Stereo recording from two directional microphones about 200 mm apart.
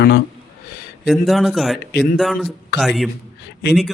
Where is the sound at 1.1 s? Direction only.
Centre (ahead or behind).